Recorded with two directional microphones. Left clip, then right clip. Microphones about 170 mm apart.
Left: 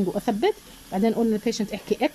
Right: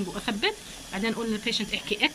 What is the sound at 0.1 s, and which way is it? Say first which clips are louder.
Speech: left 3 dB; 35° left (ahead or behind).